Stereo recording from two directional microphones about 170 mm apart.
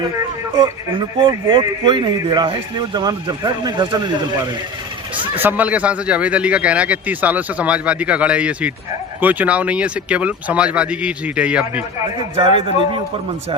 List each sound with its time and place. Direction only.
0.5 s speech: 25° right (ahead or behind)
5.4 s speech: 10° right (ahead or behind)
12.4 s a man's voice: 30° right (ahead or behind)